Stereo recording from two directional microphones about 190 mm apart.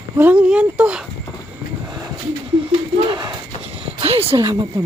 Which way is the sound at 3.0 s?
25° right (ahead or behind).